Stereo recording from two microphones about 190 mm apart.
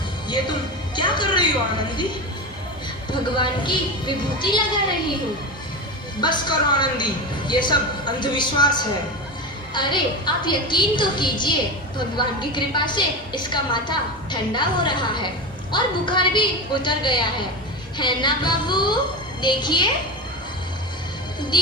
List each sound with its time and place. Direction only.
0.9 s music: 25° left (ahead or behind)
3.1 s a woman's voice: 25° left (ahead or behind)
6.1 s a woman's voice: 25° left (ahead or behind)
21.5 s a woman's voice: 25° left (ahead or behind)